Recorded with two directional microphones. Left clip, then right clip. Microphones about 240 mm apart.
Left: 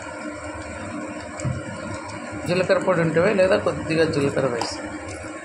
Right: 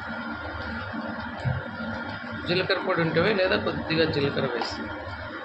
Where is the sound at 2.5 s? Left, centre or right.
Centre.